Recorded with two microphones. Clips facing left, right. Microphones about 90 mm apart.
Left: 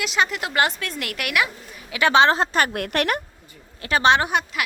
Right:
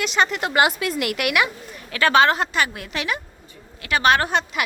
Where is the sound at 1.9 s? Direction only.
20° left (ahead or behind).